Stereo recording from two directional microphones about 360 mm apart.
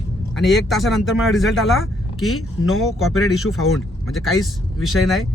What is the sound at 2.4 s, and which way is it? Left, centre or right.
Speech, left.